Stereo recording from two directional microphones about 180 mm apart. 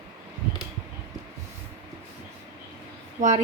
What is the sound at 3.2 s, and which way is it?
Speech, 40° right (ahead or behind).